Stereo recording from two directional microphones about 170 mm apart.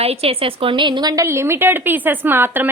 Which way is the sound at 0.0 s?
35° right (ahead or behind).